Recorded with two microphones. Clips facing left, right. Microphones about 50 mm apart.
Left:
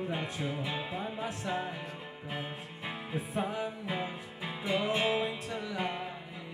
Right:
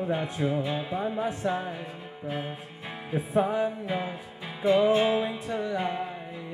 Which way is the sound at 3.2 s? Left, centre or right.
Right.